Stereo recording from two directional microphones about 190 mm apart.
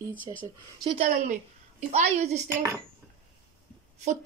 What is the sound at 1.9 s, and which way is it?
Speech, 35° right (ahead or behind).